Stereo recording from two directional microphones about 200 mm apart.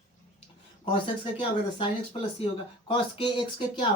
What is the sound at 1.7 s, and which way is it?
Speech, 25° left (ahead or behind).